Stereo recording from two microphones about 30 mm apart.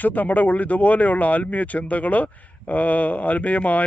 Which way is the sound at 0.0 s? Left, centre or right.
Left.